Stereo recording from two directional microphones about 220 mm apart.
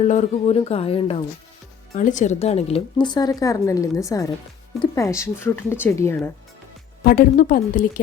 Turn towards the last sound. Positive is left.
turn(degrees=35)  # may be behind; listen again after turning